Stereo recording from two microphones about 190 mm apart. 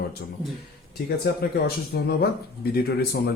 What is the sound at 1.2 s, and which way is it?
A man's voice, 55° left (ahead or behind).